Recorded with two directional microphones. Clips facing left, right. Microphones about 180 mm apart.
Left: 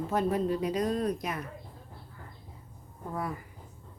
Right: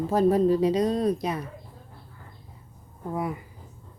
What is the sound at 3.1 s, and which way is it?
Speech, 20° right (ahead or behind).